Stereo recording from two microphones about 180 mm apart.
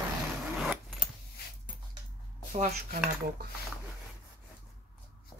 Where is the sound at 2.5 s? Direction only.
40° right (ahead or behind).